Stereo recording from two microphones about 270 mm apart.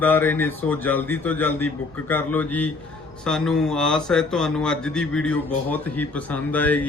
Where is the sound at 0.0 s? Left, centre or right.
Centre.